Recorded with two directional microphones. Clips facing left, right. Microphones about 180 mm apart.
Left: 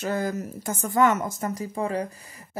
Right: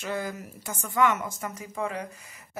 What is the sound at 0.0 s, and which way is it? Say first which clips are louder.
Speech: left 5 dB; 40° left (ahead or behind).